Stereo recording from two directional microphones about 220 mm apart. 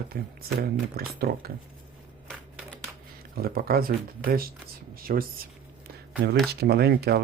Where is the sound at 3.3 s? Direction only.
40° right (ahead or behind).